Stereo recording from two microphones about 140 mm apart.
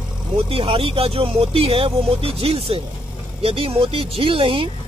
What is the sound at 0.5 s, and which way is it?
Speech, 40° right (ahead or behind).